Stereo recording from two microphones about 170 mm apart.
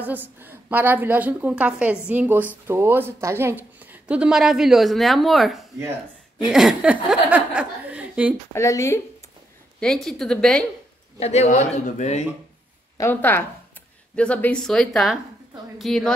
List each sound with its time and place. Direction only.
0.0 s a woman's voice: 10° right (ahead or behind)
8.5 s speech: 15° left (ahead or behind)
9.8 s speech: centre (ahead or behind)
11.1 s speech: 40° left (ahead or behind)
12.9 s speech: 15° left (ahead or behind)